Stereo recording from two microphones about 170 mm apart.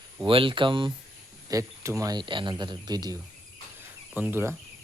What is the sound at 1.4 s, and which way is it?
Speech, 20° right (ahead or behind).